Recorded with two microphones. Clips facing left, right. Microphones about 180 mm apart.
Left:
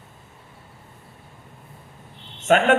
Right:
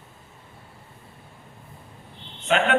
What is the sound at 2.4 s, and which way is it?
Speech, 45° left (ahead or behind).